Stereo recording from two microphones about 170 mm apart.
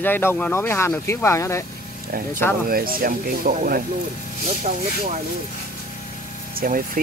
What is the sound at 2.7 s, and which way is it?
Speech, 60° right (ahead or behind).